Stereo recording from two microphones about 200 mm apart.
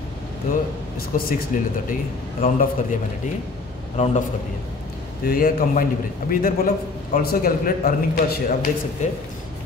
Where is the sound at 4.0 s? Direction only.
35° left (ahead or behind).